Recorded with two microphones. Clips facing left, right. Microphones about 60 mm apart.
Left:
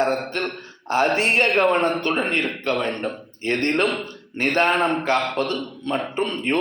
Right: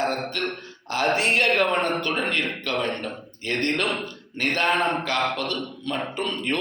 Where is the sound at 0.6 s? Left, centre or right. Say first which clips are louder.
Left 6 dB; left.